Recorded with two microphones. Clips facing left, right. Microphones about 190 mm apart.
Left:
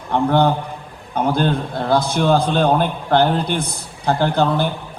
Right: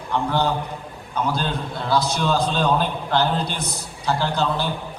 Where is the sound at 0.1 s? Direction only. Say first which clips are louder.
Left 6 dB; 55° left (ahead or behind).